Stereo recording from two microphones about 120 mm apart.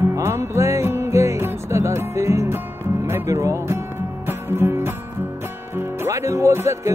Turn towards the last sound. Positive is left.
turn(degrees=-25)  # may be behind; listen again after turning